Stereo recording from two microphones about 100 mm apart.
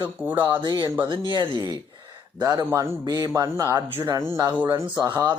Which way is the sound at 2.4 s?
40° right (ahead or behind).